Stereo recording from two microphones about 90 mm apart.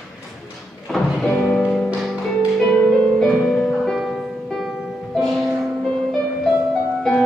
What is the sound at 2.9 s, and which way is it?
Music, 5° left (ahead or behind).